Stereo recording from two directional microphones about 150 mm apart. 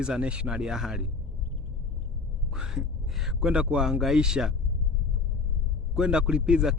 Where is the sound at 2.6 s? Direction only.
5° right (ahead or behind).